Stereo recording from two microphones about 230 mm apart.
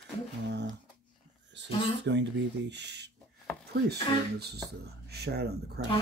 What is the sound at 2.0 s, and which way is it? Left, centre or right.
Speech, right.